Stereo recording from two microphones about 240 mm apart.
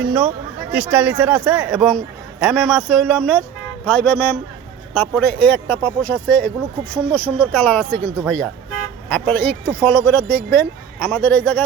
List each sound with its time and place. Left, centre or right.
0.0 s a man's voice: centre